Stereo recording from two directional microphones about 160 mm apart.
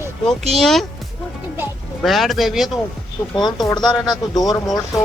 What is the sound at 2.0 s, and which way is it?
Speech, centre (ahead or behind).